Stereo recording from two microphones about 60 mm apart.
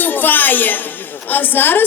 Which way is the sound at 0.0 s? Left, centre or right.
Left.